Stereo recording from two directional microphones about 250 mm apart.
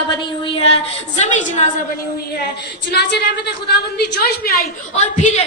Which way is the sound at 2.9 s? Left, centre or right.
Left.